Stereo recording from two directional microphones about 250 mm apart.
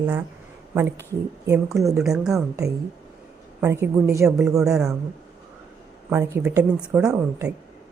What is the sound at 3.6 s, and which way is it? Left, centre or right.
A woman's voice, centre.